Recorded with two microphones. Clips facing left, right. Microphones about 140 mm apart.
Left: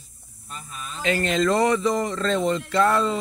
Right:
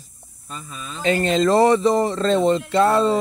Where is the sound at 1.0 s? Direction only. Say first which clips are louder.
Right 4 dB; 30° right (ahead or behind).